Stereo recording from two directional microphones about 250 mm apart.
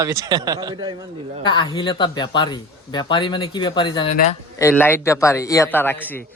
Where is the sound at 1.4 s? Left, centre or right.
Centre.